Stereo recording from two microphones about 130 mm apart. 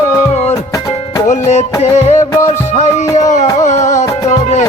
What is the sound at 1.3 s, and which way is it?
Music, 60° left (ahead or behind).